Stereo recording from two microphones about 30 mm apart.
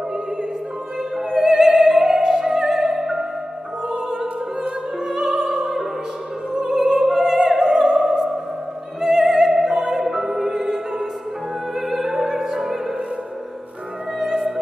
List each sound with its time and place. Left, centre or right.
1.5 s opera: centre
4.9 s music: centre
6.9 s opera: centre
14.1 s music: centre